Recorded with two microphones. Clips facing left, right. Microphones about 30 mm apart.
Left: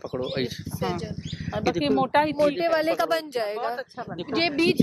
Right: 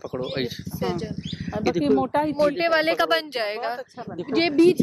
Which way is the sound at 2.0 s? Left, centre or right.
Left.